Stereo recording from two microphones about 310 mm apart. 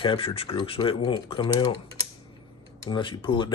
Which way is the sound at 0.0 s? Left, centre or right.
Centre.